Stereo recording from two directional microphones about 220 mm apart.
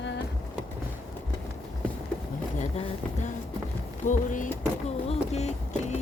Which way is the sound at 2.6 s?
35° left (ahead or behind).